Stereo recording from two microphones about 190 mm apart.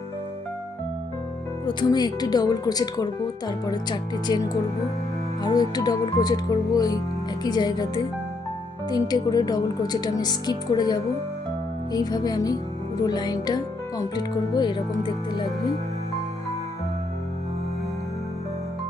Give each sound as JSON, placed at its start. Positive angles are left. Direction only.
{"t": 1.6, "sound": "speech", "side_deg": 25}